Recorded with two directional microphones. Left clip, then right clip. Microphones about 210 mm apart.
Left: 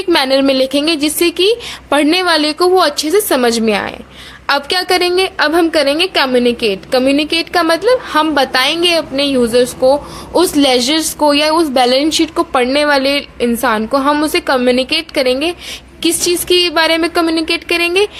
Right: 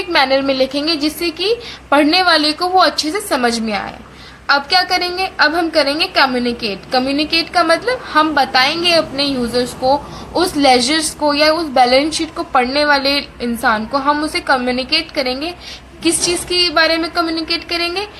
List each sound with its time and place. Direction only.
0.1 s a woman's voice: 50° left (ahead or behind)